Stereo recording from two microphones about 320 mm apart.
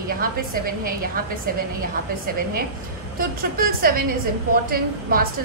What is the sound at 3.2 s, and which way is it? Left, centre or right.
Speech, right.